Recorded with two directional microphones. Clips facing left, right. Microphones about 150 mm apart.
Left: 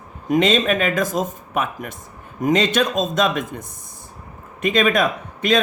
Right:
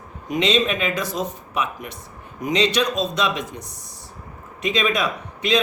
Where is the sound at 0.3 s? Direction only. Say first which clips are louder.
Left 3 dB; 50° left (ahead or behind).